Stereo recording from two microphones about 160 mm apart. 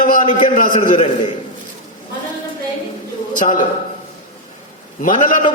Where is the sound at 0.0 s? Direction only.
55° left (ahead or behind).